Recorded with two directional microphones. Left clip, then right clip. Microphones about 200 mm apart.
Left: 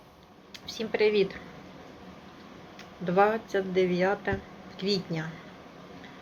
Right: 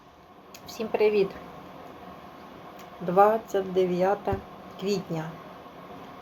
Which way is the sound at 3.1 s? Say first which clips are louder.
Right 4 dB; 45° right (ahead or behind).